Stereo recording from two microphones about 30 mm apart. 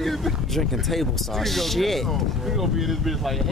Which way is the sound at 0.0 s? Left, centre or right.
Centre.